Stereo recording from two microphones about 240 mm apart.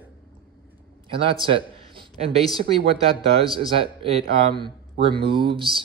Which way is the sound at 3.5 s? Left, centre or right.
Right.